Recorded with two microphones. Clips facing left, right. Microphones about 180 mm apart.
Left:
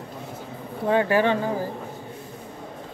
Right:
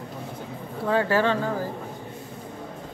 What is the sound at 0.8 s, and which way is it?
Speech, 20° left (ahead or behind).